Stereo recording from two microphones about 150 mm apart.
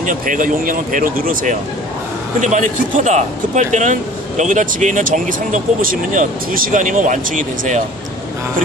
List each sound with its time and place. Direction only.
0.0 s speech: 60° right (ahead or behind)